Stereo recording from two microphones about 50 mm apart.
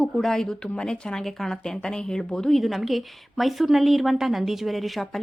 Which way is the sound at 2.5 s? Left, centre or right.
Centre.